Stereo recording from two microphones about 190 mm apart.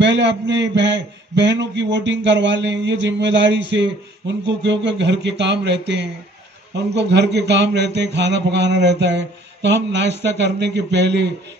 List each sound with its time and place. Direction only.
0.0 s a man's voice: 65° right (ahead or behind)